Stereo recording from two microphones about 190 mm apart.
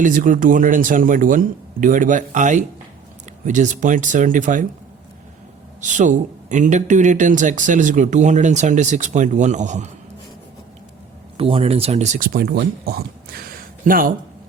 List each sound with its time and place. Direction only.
0.0 s speech: 45° right (ahead or behind)
5.8 s speech: 40° right (ahead or behind)
11.3 s speech: 30° right (ahead or behind); by 14.1 s 50° right (ahead or behind)